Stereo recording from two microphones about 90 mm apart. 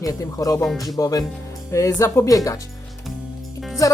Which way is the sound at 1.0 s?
40° left (ahead or behind).